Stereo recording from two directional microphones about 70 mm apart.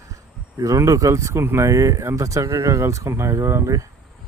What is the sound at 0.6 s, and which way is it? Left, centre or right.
Speech, right.